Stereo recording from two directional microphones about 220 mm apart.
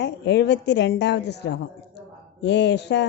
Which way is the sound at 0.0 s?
50° left (ahead or behind).